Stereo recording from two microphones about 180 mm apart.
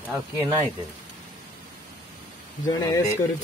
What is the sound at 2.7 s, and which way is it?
Speech, 20° left (ahead or behind).